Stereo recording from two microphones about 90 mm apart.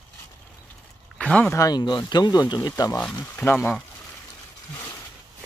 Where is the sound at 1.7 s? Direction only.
55° left (ahead or behind).